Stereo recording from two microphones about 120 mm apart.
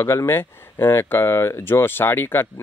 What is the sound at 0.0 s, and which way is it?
Speech, 20° left (ahead or behind).